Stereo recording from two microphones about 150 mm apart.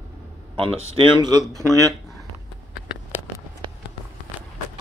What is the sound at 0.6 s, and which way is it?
Speech, 35° right (ahead or behind).